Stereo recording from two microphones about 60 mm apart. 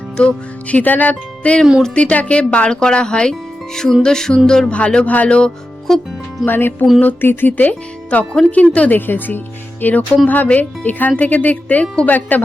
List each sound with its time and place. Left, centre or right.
0.2 s speech: left
5.9 s speech: centre
6.4 s speech: left
9.0 s speech: left